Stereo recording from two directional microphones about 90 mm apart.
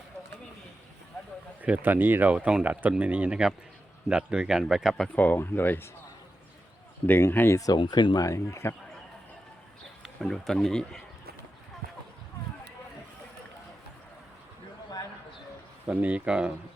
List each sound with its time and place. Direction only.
1.6 s speech: 15° right (ahead or behind)
5.0 s speech: 15° left (ahead or behind)
7.1 s speech: 25° left (ahead or behind)
7.8 s speech: 60° left (ahead or behind)
8.3 s a man's voice: 30° left (ahead or behind)
10.0 s a man's voice: centre (ahead or behind)
15.9 s speech: 15° right (ahead or behind)